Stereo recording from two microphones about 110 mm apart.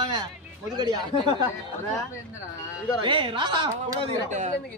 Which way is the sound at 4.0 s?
90° right.